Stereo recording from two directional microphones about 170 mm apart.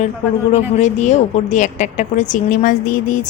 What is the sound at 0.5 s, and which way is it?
A woman's voice, 45° left (ahead or behind).